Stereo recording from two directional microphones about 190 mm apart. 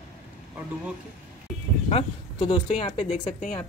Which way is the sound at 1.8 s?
30° left (ahead or behind).